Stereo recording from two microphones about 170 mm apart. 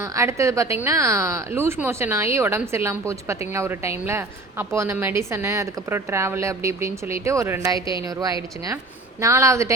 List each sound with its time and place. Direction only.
0.0 s a woman's voice: 15° right (ahead or behind)